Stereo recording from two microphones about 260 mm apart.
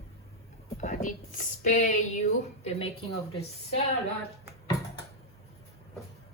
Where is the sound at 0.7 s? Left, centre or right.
Left.